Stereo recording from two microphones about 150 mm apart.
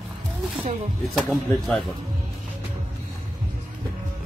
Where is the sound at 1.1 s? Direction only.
Centre (ahead or behind).